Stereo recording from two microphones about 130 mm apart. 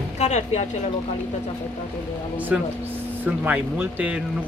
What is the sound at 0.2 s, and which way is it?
Speech, 60° left (ahead or behind).